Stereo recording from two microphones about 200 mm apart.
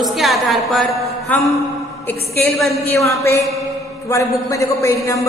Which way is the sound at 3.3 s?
15° left (ahead or behind).